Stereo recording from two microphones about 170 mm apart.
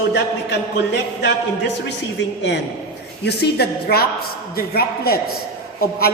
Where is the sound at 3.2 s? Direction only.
70° left (ahead or behind).